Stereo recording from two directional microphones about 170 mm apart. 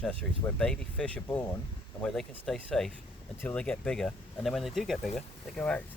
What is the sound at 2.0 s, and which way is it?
Speech, centre (ahead or behind).